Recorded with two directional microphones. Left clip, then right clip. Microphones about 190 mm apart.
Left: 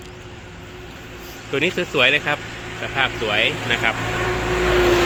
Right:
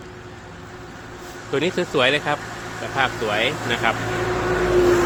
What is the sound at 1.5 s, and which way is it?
Speech, 5° right (ahead or behind).